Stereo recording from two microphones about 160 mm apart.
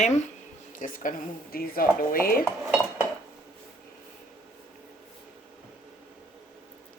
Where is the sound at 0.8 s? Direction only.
55° left (ahead or behind).